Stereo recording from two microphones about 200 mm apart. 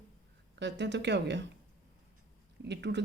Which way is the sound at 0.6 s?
60° right (ahead or behind).